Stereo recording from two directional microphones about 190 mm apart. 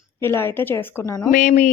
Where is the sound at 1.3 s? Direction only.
40° left (ahead or behind).